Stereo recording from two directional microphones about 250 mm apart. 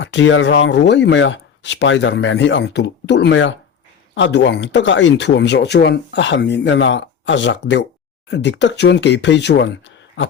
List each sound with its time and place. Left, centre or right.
0.0 s speech: left